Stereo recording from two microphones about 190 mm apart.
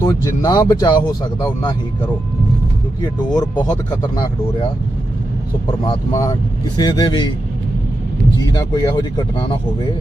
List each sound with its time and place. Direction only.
0.0 s speech: 20° left (ahead or behind)
3.2 s speech: 20° left (ahead or behind)
5.8 s speech: 20° left (ahead or behind)
8.4 s speech: 20° left (ahead or behind)